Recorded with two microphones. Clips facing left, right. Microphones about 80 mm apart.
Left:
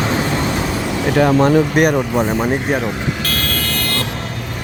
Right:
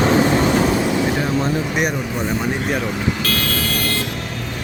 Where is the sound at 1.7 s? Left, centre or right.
Left.